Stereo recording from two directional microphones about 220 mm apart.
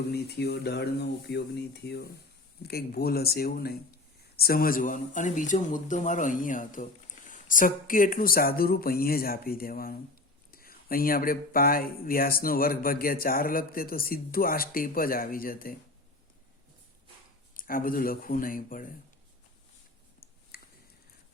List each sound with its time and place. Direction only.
0.1 s speech: 50° left (ahead or behind)
17.5 s speech: 40° left (ahead or behind)
20.5 s squish: 45° left (ahead or behind)